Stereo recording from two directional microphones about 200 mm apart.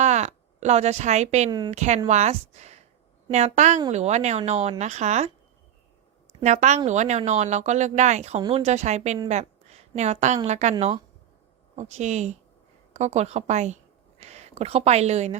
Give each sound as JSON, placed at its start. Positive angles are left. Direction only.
{"t": 0.0, "sound": "speech", "side_deg": -35}
{"t": 1.5, "sound": "a woman's voice", "side_deg": -20}
{"t": 1.7, "sound": "speech", "side_deg": -35}
{"t": 6.4, "sound": "a woman's voice", "side_deg": -35}